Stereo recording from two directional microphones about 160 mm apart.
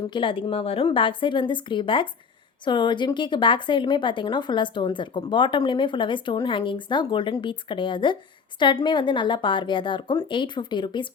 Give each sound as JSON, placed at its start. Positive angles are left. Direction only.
{"t": 0.1, "sound": "speech", "side_deg": 30}